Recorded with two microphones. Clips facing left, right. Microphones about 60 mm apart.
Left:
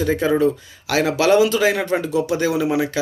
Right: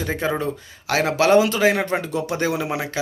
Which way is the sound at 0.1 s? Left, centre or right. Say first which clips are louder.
Left 6 dB; right.